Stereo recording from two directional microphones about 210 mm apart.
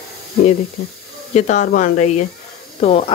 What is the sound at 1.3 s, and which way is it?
Speech, 35° left (ahead or behind).